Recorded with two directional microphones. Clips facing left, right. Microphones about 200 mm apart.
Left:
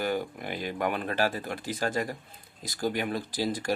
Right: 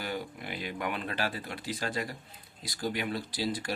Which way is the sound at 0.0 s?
50° left (ahead or behind).